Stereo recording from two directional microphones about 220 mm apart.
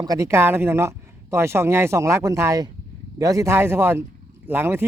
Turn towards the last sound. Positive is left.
turn(degrees=-10)  # may be behind; listen again after turning